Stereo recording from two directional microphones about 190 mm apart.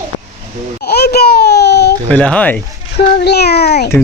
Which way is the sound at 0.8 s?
55° left (ahead or behind).